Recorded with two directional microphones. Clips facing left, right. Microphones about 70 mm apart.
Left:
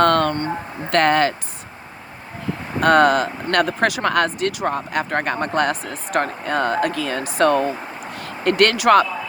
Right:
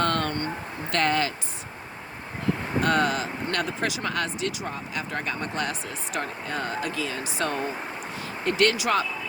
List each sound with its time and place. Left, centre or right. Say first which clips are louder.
0.0 s a sound: left 9 dB; left
0.9 s speech: left 8 dB; left
2.8 s speech: left 10 dB; left